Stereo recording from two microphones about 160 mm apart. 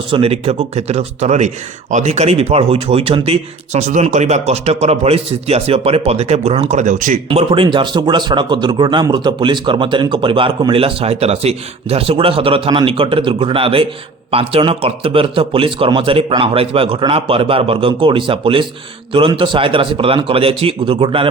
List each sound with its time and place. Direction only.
0.1 s speech: 35° right (ahead or behind); by 7.2 s 50° right (ahead or behind)
7.3 s speech: 30° right (ahead or behind)